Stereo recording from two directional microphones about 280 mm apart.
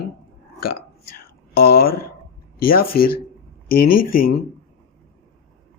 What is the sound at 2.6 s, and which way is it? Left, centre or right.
Speech, left.